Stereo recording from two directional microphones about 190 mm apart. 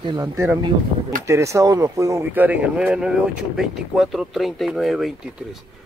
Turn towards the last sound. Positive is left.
turn(degrees=0)  # may be behind; listen again after turning